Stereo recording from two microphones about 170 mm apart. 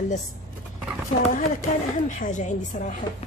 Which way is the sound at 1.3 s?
50° left (ahead or behind).